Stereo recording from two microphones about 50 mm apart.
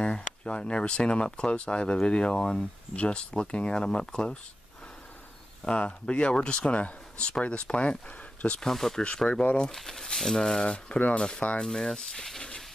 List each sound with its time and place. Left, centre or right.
0.0 s speech: left
5.7 s speech: left
8.5 s speech: centre
9.3 s speech: left
9.7 s speech: centre
11.6 s speech: centre